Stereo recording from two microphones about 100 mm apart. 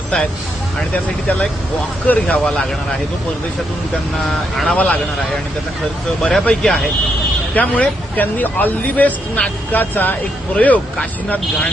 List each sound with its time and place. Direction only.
2.0 s speech: 15° left (ahead or behind)
4.5 s speech: 5° left (ahead or behind)
6.2 s speech: 10° left (ahead or behind)